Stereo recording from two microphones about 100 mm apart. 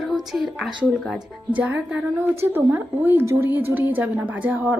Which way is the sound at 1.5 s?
15° right (ahead or behind).